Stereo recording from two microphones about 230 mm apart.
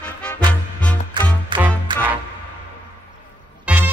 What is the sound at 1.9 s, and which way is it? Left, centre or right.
Music, centre.